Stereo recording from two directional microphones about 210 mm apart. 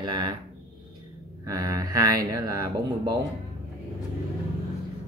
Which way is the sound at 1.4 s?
15° right (ahead or behind).